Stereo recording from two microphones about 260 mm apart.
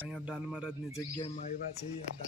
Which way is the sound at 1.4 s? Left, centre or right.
Left.